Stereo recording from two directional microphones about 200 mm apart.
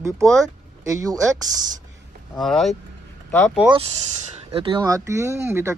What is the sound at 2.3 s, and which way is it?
Speech, centre (ahead or behind).